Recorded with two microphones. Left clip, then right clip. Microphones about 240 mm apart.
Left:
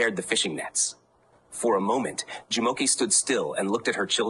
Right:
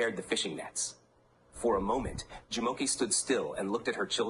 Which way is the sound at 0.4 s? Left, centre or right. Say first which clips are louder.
Left 7 dB; left.